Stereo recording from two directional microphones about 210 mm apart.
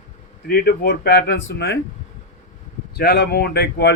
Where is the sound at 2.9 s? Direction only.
50° left (ahead or behind).